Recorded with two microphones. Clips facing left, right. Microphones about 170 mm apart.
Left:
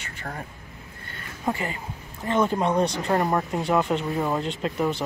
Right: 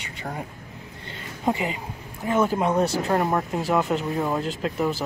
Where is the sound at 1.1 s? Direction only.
20° right (ahead or behind).